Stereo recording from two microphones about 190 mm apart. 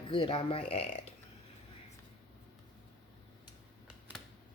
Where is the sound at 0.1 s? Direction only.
30° left (ahead or behind).